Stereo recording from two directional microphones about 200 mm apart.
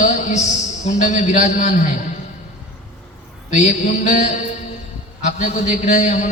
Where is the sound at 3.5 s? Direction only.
35° left (ahead or behind).